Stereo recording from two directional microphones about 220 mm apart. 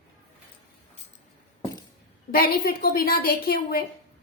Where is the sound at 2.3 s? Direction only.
40° left (ahead or behind).